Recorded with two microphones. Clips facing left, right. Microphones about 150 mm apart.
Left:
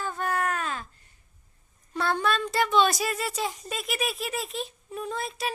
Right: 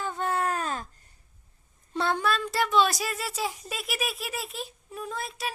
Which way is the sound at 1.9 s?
25° right (ahead or behind).